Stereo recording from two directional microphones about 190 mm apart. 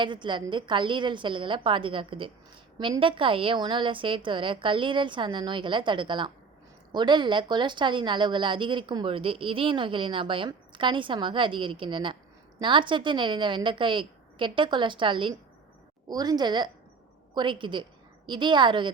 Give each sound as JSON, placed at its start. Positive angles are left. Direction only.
{"t": 0.0, "sound": "a woman's voice", "side_deg": -25}